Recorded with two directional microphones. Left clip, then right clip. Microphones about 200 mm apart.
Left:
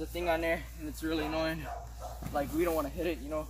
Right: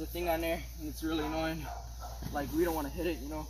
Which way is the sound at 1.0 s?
10° left (ahead or behind).